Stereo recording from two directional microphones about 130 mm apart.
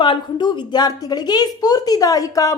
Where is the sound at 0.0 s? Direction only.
35° left (ahead or behind).